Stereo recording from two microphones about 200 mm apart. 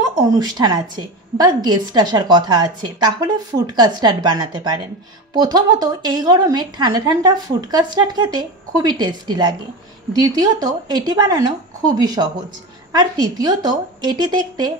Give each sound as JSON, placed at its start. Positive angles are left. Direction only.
{"t": 0.3, "sound": "a woman's voice", "side_deg": -20}